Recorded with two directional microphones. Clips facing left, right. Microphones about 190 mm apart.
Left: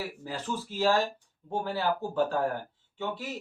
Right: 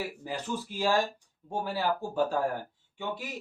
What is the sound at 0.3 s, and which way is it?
Speech, 15° right (ahead or behind).